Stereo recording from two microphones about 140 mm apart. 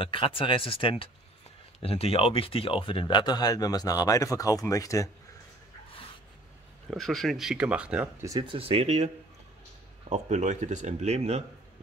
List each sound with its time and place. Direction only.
0.0 s speech: 40° left (ahead or behind); by 5.1 s 25° left (ahead or behind)
6.9 s speech: centre (ahead or behind)
8.2 s speech: 30° right (ahead or behind); by 11.4 s 50° right (ahead or behind)